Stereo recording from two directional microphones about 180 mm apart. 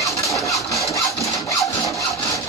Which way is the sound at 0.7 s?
15° left (ahead or behind).